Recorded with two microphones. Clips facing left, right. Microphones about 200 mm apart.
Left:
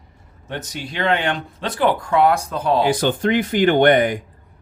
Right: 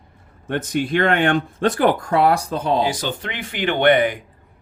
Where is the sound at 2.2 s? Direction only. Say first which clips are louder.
Even; 30° right (ahead or behind).